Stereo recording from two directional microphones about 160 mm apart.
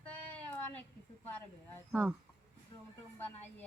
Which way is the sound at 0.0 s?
10° left (ahead or behind).